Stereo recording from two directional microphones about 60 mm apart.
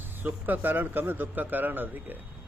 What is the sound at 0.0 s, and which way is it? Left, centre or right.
Speech, right.